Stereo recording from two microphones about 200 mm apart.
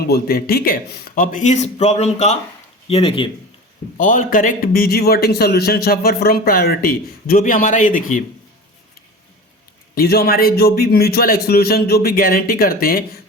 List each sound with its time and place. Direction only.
0.1 s a man's voice: 50° left (ahead or behind); by 3.2 s 25° left (ahead or behind)
3.9 s a man's voice: 40° left (ahead or behind)
9.9 s a man's voice: 50° left (ahead or behind)